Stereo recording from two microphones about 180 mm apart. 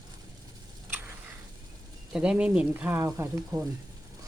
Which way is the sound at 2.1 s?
5° right (ahead or behind).